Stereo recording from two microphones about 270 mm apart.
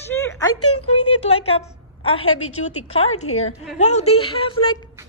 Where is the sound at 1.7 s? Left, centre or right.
Centre.